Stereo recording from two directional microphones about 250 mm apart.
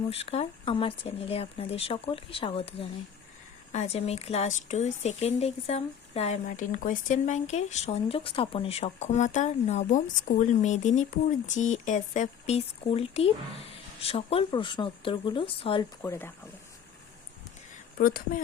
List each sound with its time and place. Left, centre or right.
0.1 s speech: left
17.9 s speech: left